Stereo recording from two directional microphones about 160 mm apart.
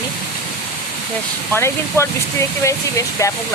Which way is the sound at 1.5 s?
15° left (ahead or behind).